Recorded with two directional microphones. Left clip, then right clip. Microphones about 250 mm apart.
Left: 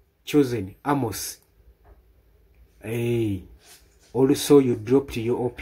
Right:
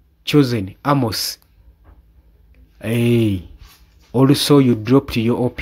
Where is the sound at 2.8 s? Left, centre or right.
Right.